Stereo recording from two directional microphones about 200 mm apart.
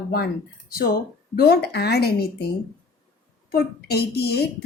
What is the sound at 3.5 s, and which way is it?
Speech, 55° left (ahead or behind).